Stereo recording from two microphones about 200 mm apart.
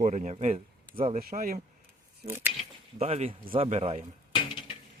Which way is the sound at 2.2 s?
10° right (ahead or behind).